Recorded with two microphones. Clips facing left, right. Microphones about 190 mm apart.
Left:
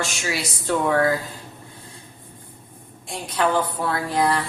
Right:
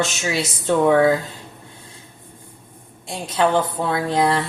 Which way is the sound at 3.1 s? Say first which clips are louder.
Right 3 dB; 25° right (ahead or behind).